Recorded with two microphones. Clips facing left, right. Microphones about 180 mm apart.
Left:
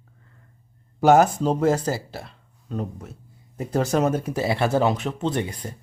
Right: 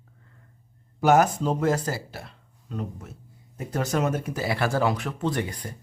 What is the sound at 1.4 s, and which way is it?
Speech, 30° left (ahead or behind).